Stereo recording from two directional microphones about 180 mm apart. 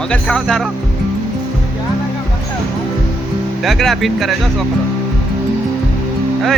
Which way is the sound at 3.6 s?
Centre (ahead or behind).